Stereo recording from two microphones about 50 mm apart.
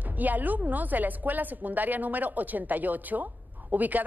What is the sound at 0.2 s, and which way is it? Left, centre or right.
A woman's voice, right.